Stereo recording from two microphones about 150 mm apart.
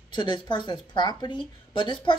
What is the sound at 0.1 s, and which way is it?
A woman's voice, 30° left (ahead or behind).